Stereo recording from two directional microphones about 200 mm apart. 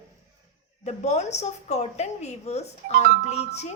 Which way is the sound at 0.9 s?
35° left (ahead or behind).